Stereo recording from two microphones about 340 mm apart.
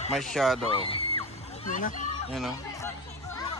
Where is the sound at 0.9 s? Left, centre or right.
Centre.